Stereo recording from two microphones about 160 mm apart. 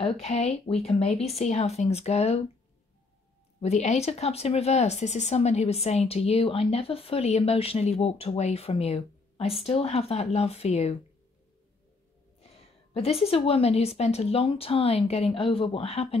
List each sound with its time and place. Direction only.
0.0 s speech: 40° left (ahead or behind)
3.6 s speech: 45° left (ahead or behind)
12.4 s speech: 40° left (ahead or behind)